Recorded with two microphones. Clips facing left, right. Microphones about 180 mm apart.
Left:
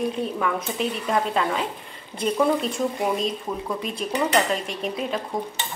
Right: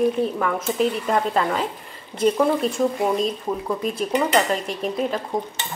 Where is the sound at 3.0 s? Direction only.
5° right (ahead or behind).